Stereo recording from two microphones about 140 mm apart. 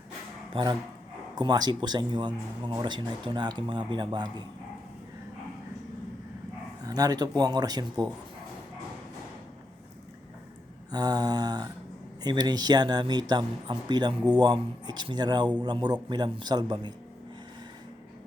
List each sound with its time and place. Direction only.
0.5 s speech: 35° right (ahead or behind)
6.8 s speech: 25° right (ahead or behind)
10.9 s speech: 30° right (ahead or behind)